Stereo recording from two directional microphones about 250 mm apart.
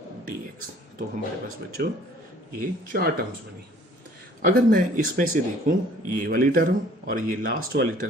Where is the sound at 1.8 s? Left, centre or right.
Right.